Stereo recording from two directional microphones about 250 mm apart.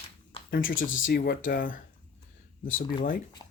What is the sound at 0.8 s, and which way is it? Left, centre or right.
Speech, left.